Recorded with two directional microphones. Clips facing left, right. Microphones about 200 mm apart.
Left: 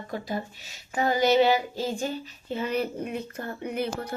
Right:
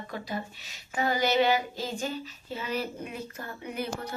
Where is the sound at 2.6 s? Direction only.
50° left (ahead or behind).